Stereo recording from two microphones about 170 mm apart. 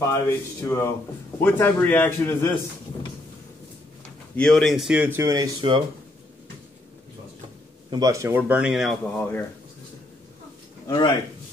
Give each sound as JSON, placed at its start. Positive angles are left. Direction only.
{"t": 0.0, "sound": "speech", "side_deg": 15}
{"t": 4.4, "sound": "speech", "side_deg": 5}
{"t": 7.9, "sound": "speech", "side_deg": -20}
{"t": 10.9, "sound": "speech", "side_deg": 30}